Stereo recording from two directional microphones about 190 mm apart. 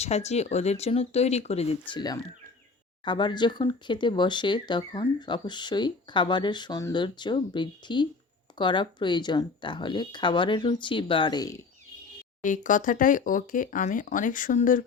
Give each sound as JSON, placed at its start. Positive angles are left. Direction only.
{"t": 0.0, "sound": "speech", "side_deg": 35}
{"t": 1.9, "sound": "speech", "side_deg": 20}
{"t": 12.4, "sound": "speech", "side_deg": 40}